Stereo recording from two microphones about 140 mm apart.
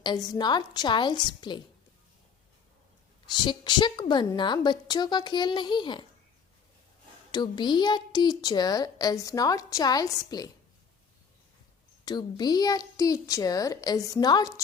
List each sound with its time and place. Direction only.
0.0 s speech: 30° left (ahead or behind)
3.2 s speech: 30° left (ahead or behind)
7.3 s a woman's voice: 30° left (ahead or behind)
12.0 s a woman's voice: 30° left (ahead or behind)